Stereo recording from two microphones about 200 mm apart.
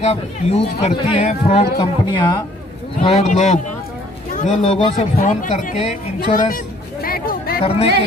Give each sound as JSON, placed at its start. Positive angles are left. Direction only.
{"t": 0.0, "sound": "speech", "side_deg": 30}
{"t": 3.0, "sound": "speech", "side_deg": 35}
{"t": 7.0, "sound": "a sound", "side_deg": 45}
{"t": 7.6, "sound": "speech", "side_deg": 30}